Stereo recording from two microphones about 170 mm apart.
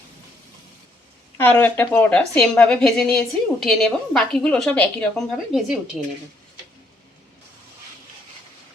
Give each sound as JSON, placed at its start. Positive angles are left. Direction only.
{"t": 1.4, "sound": "a woman's voice", "side_deg": 10}